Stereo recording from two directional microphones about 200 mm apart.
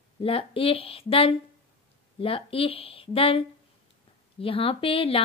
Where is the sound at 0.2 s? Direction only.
25° left (ahead or behind).